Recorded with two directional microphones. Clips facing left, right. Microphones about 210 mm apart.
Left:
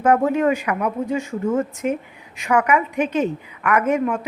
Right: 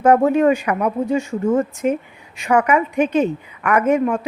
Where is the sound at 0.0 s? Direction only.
30° right (ahead or behind).